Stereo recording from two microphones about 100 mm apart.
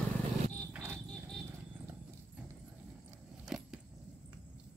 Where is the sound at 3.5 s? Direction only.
5° right (ahead or behind).